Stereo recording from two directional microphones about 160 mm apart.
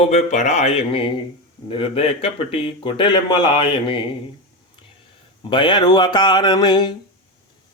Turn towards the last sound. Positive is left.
turn(degrees=25)  # may be behind; listen again after turning